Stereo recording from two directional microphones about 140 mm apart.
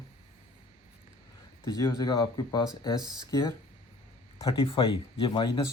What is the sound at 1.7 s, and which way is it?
A man's voice, 25° left (ahead or behind).